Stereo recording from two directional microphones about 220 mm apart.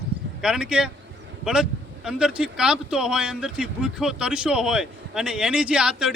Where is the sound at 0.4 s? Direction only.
5° right (ahead or behind).